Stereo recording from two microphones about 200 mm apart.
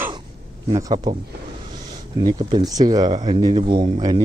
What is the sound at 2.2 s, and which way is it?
Speech, 20° right (ahead or behind).